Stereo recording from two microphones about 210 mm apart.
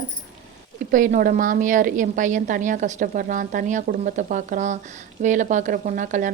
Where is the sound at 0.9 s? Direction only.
40° right (ahead or behind).